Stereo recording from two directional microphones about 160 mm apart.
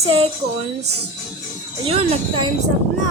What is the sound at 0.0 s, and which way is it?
Speech, 40° right (ahead or behind).